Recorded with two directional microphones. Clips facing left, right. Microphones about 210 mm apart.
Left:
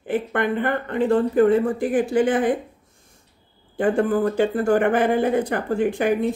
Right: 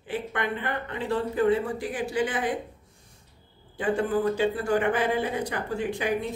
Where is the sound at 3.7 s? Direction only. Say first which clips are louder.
Left 6 dB; 50° left (ahead or behind).